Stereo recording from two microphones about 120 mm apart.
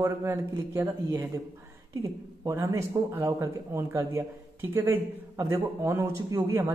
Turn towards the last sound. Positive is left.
turn(degrees=-30)  # may be behind; listen again after turning